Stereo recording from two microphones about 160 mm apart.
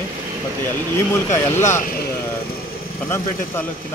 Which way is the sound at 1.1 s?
20° left (ahead or behind).